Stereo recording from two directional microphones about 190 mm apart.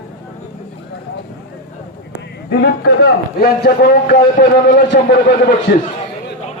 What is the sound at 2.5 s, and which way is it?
A man's voice, 60° left (ahead or behind).